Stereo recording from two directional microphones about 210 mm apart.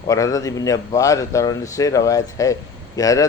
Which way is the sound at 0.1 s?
15° left (ahead or behind).